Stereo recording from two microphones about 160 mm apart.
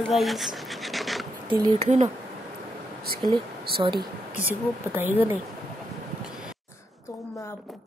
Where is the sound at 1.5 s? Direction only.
30° right (ahead or behind).